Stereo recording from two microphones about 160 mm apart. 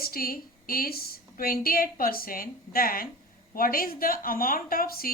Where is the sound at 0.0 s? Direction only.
65° left (ahead or behind).